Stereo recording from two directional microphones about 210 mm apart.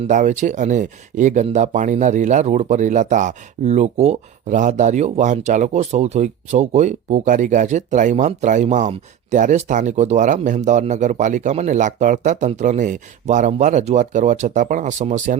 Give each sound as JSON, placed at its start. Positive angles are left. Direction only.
{"t": 0.1, "sound": "speech", "side_deg": -35}